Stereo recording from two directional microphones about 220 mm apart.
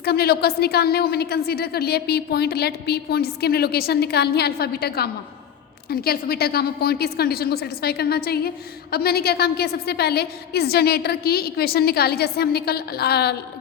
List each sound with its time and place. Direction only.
0.0 s a woman's voice: 45° left (ahead or behind)